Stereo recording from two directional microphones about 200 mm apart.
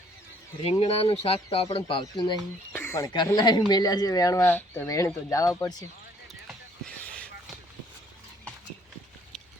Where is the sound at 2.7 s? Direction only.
10° left (ahead or behind).